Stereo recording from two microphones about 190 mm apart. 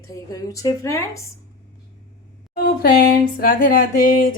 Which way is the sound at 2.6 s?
45° left (ahead or behind).